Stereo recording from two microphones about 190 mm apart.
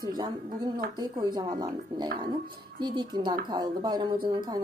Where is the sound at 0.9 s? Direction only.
20° right (ahead or behind).